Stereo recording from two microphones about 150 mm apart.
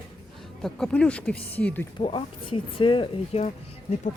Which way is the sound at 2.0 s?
35° left (ahead or behind).